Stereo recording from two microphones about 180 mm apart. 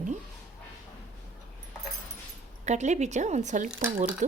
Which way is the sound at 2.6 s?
40° right (ahead or behind).